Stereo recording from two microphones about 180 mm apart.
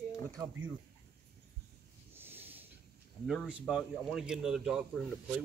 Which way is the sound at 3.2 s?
5° right (ahead or behind).